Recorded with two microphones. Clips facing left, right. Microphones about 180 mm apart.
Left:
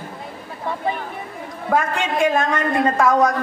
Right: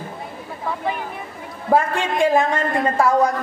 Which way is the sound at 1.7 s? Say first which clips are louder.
Right 2 dB; 30° right (ahead or behind).